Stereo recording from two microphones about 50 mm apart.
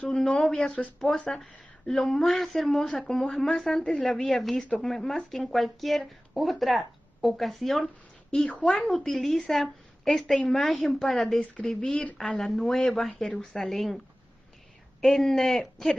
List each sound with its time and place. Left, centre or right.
0.1 s speech: centre
13.6 s speech: centre